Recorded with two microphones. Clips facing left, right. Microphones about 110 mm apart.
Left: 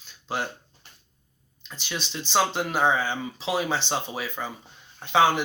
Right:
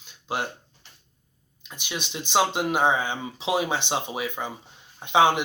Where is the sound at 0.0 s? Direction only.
15° right (ahead or behind).